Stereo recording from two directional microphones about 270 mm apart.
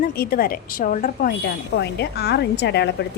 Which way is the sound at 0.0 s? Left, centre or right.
Left.